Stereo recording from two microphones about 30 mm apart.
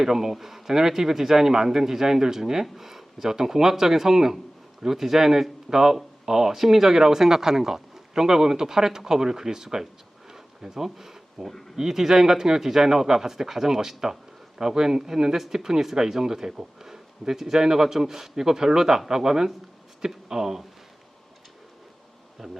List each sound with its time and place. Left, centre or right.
0.0 s speech: centre
22.4 s speech: centre